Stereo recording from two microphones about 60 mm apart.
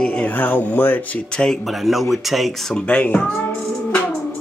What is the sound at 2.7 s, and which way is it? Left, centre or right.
Music, centre.